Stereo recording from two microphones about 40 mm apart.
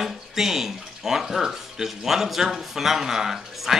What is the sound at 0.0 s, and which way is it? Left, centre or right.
Speech, centre.